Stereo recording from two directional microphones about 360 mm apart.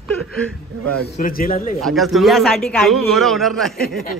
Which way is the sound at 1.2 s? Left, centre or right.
Left.